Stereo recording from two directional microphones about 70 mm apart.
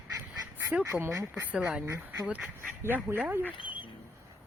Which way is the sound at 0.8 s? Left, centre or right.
Right.